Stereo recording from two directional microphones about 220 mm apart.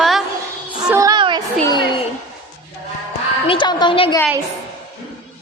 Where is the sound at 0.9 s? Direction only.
15° right (ahead or behind).